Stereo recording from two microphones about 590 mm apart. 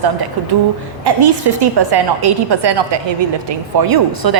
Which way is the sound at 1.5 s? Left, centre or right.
Right.